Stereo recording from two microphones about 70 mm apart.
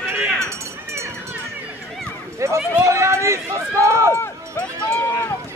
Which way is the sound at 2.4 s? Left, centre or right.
Right.